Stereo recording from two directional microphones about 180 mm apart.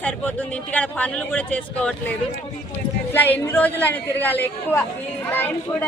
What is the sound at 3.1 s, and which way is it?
Speech, 10° left (ahead or behind).